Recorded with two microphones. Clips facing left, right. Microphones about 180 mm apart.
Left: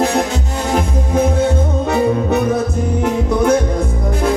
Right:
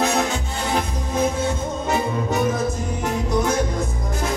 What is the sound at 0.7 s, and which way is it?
Music, 50° left (ahead or behind).